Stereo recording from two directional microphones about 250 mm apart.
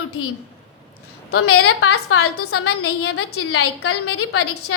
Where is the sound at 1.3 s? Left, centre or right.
Left.